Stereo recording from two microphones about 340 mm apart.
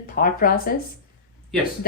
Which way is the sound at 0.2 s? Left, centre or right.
Left.